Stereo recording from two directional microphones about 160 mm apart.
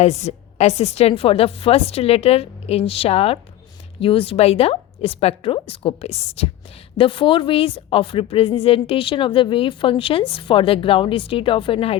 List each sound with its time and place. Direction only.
0.0 s a woman's voice: 45° left (ahead or behind)